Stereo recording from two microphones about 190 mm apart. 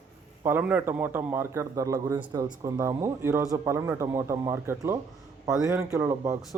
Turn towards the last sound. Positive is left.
turn(degrees=-15)  # may be behind; listen again after turning